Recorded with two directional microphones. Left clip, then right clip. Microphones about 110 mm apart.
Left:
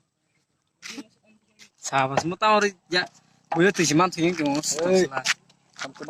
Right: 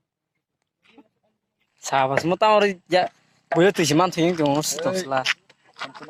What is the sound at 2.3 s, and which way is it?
Speech, 10° right (ahead or behind).